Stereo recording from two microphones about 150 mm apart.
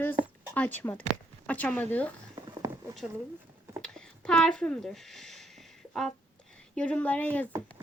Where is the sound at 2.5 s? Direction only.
20° right (ahead or behind).